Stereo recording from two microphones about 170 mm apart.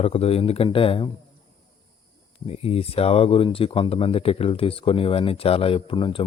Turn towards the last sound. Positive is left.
turn(degrees=30)  # may be behind; listen again after turning